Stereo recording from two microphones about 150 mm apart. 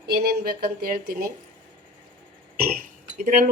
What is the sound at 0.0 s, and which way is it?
Speech, 90° right.